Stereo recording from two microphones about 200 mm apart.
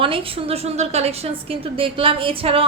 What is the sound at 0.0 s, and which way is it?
A woman's voice, 25° right (ahead or behind).